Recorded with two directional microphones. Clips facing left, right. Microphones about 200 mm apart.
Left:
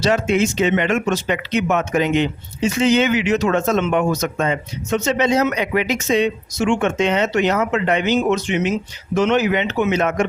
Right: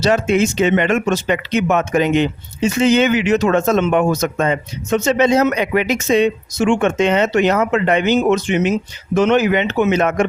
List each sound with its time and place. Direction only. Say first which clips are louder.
0.0 s speech: right 2 dB; 45° right (ahead or behind)